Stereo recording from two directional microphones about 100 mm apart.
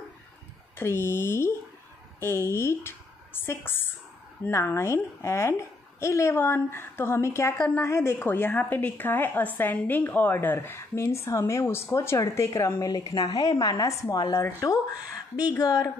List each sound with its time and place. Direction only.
0.7 s a woman's voice: 25° left (ahead or behind)
12.9 s a woman's voice: 40° left (ahead or behind)